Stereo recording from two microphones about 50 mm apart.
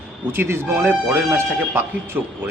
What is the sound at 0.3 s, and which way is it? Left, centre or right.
Speech, right.